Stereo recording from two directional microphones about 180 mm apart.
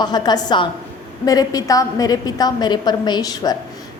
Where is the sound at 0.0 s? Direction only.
25° left (ahead or behind).